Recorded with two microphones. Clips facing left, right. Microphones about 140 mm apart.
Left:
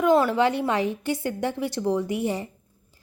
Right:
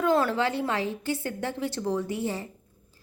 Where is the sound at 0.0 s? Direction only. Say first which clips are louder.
Left 4 dB; 15° left (ahead or behind).